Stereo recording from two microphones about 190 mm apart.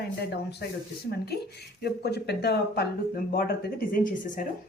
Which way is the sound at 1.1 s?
55° left (ahead or behind).